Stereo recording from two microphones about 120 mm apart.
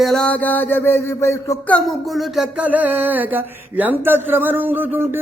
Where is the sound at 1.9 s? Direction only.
Centre (ahead or behind).